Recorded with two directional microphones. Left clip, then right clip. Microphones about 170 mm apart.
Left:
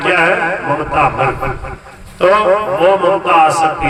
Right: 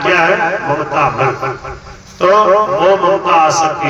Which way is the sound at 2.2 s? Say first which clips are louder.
Right 2 dB; 25° left (ahead or behind).